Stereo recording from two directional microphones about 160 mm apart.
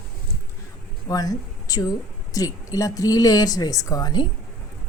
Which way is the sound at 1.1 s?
25° left (ahead or behind).